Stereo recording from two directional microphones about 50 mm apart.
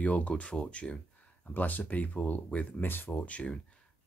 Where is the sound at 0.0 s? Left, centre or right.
Left.